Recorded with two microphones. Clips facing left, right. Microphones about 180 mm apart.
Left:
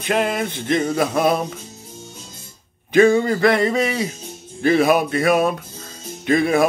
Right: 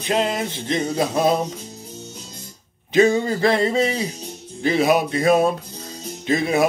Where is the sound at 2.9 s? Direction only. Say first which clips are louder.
Left 3 dB; 20° right (ahead or behind).